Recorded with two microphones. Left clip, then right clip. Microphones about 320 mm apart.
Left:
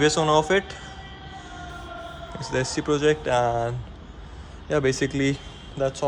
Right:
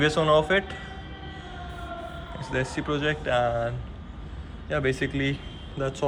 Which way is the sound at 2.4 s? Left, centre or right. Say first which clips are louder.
Left 3 dB; left.